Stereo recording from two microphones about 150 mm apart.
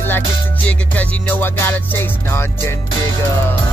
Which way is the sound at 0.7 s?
10° left (ahead or behind).